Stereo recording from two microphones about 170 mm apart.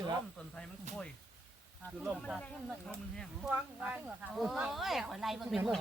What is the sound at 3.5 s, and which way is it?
Speech, 10° right (ahead or behind).